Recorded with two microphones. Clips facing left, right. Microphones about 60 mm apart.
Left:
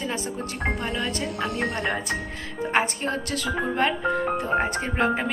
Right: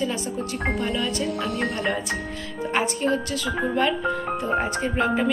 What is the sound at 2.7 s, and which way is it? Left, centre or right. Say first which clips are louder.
Speech: right 2 dB; left.